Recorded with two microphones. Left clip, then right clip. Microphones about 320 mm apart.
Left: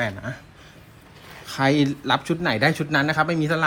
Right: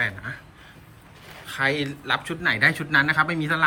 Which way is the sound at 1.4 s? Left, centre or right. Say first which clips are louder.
Left 3 dB; centre.